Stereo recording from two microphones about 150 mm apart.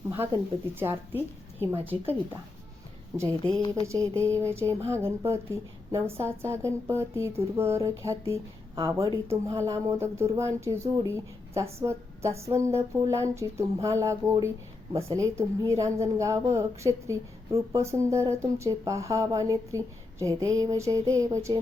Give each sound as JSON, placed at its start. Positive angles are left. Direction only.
{"t": 0.8, "sound": "a woman's voice", "side_deg": -15}
{"t": 3.7, "sound": "a woman's voice", "side_deg": -20}